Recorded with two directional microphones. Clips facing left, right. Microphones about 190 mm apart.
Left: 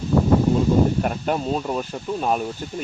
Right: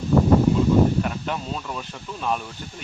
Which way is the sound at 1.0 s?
40° left (ahead or behind).